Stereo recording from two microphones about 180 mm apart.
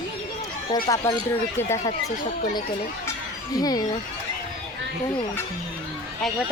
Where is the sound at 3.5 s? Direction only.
20° left (ahead or behind).